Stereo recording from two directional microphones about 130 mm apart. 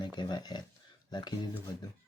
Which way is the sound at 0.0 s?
35° left (ahead or behind).